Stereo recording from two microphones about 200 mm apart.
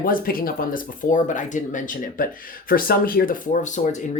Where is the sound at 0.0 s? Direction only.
45° left (ahead or behind).